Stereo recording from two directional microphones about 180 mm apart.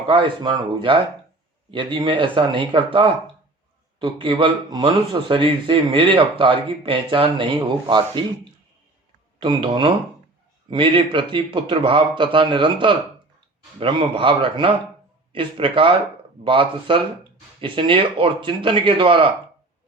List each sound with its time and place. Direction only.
0.1 s a man's voice: 25° right (ahead or behind)
9.4 s a man's voice: 25° right (ahead or behind)